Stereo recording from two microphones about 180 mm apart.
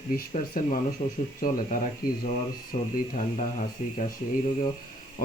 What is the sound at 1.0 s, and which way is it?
Speech, 30° left (ahead or behind).